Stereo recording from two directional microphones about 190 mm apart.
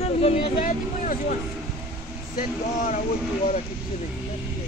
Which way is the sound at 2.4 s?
45° left (ahead or behind).